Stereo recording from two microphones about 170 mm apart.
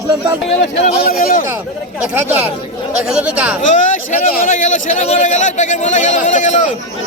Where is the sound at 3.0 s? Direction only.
5° right (ahead or behind).